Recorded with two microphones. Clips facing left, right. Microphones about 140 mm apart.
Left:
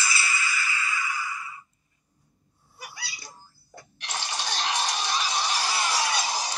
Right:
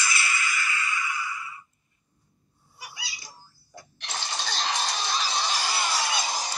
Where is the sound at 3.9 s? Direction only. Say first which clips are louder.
Left 1 dB; 15° left (ahead or behind).